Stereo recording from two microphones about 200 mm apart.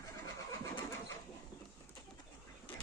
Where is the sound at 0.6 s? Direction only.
15° left (ahead or behind).